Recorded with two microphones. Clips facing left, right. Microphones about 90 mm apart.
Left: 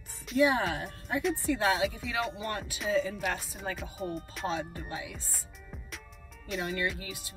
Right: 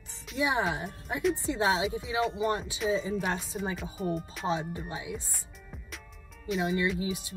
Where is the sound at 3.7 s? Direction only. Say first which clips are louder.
Right 2 dB; centre (ahead or behind).